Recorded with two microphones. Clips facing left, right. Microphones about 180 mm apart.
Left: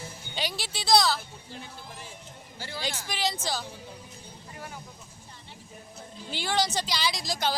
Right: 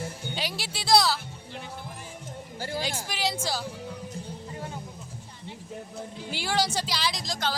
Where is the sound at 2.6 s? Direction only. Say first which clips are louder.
Right 6 dB; 45° right (ahead or behind).